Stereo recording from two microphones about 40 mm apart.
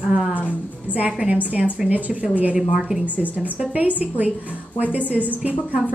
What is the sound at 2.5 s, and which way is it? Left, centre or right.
Speech, centre.